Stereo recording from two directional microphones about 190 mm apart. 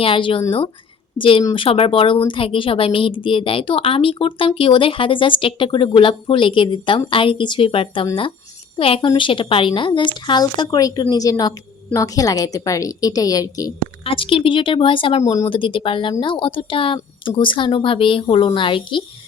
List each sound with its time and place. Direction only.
0.0 s a woman's voice: 25° left (ahead or behind)
15.2 s a woman's voice: 15° left (ahead or behind)